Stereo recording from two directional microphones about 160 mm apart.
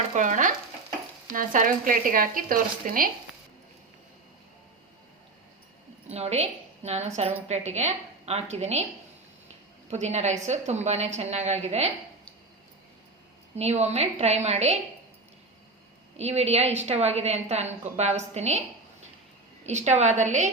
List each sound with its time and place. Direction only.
0.2 s a woman's voice: 55° right (ahead or behind)
6.1 s a woman's voice: 40° right (ahead or behind)
9.9 s a woman's voice: 45° right (ahead or behind)
13.6 s a woman's voice: 40° right (ahead or behind)
16.1 s a woman's voice: 40° right (ahead or behind)
19.6 s a woman's voice: 45° right (ahead or behind)